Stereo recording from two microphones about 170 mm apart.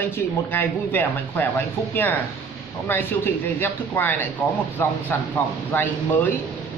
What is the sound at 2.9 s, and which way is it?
Speech, 10° left (ahead or behind).